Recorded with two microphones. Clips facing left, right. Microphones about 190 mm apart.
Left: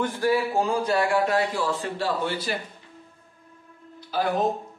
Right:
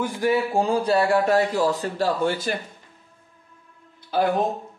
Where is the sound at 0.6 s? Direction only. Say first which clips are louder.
Right 3 dB; 35° right (ahead or behind).